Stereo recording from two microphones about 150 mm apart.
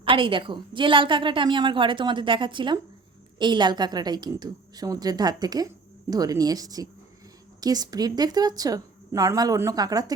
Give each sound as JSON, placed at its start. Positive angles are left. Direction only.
{"t": 0.0, "sound": "a woman's voice", "side_deg": -35}